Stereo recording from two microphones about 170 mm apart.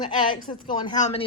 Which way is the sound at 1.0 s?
40° left (ahead or behind).